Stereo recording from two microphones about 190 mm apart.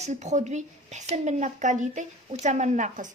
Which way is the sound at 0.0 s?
40° right (ahead or behind).